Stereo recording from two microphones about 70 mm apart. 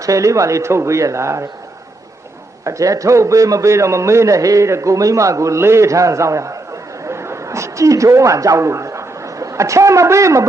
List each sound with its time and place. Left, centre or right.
0.0 s a man's voice: right
2.6 s a man's voice: right
7.1 s a sound: right